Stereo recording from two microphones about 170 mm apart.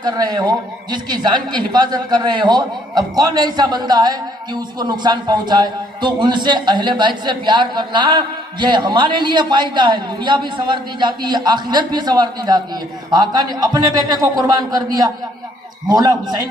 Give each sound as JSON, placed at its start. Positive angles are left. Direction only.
{"t": 0.0, "sound": "a man's voice", "side_deg": -25}